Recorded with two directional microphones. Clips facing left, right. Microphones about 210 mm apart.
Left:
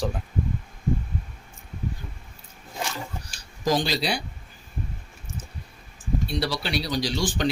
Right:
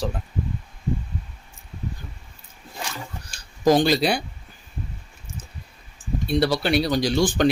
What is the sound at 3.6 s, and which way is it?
Speech, 55° right (ahead or behind).